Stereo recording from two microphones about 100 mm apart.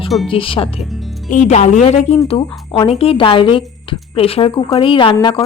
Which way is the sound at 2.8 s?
75° left (ahead or behind).